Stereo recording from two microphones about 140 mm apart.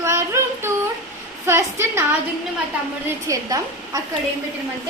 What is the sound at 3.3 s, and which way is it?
Speech, 25° right (ahead or behind).